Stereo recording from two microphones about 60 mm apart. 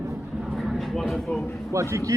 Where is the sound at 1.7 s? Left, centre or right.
Right.